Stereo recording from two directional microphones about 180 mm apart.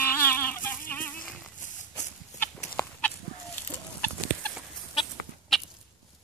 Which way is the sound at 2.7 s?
10° left (ahead or behind).